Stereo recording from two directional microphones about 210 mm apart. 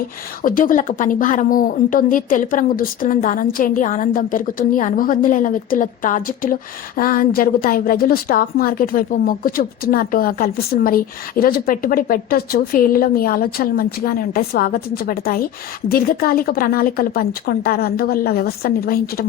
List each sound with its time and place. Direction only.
0.4 s a woman's voice: 40° left (ahead or behind)